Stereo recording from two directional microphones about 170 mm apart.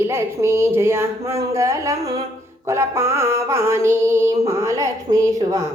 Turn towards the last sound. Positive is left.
turn(degrees=-20)  # may be behind; listen again after turning